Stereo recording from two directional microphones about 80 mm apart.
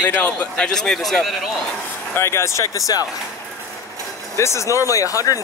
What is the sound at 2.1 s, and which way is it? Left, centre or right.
Speech, left.